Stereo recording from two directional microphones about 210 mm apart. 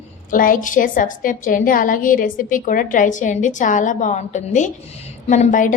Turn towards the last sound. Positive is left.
turn(degrees=40)  # may be behind; listen again after turning